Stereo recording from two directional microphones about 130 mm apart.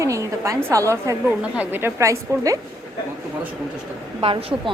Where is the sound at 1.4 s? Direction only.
15° right (ahead or behind).